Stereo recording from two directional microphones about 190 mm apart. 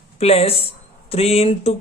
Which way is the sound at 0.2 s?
30° left (ahead or behind).